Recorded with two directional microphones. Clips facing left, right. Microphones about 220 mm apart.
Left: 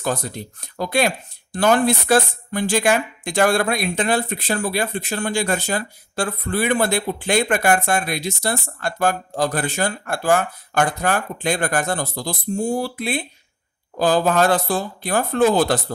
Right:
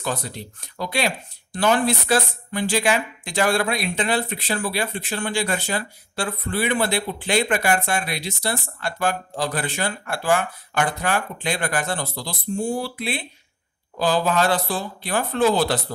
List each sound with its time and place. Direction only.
0.0 s speech: 45° left (ahead or behind)